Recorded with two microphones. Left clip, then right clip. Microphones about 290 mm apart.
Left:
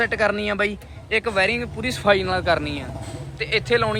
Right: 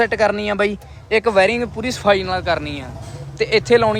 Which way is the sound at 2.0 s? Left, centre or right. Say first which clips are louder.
Right 3 dB; centre.